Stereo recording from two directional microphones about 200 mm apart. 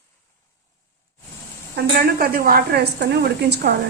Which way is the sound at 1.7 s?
50° right (ahead or behind).